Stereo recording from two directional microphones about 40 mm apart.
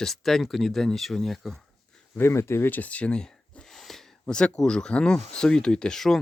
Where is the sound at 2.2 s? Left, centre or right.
Left.